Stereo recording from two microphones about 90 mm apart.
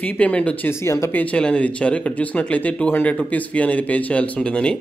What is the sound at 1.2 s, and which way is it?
Speech, 15° left (ahead or behind).